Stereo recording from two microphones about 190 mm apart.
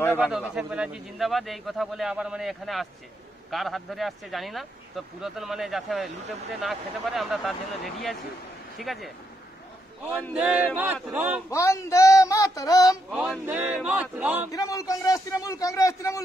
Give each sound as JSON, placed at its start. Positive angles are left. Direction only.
{"t": 0.0, "sound": "speech", "side_deg": 10}
{"t": 0.6, "sound": "speech", "side_deg": -5}
{"t": 10.3, "sound": "male singing", "side_deg": -5}
{"t": 11.5, "sound": "speech", "side_deg": 15}
{"t": 13.1, "sound": "male singing", "side_deg": -5}
{"t": 14.5, "sound": "speech", "side_deg": 15}